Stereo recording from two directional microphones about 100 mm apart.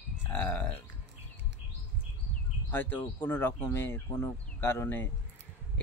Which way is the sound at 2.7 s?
20° left (ahead or behind).